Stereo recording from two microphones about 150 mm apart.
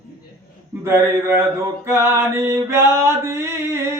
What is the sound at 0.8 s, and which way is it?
Mantra, 15° right (ahead or behind).